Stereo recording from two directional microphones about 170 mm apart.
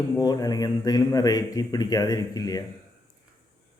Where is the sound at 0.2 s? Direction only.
20° left (ahead or behind).